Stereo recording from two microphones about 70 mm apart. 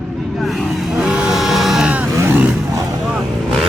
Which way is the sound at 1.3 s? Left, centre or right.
Centre.